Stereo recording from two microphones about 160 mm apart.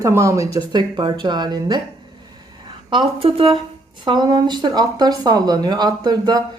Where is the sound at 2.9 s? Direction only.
35° right (ahead or behind).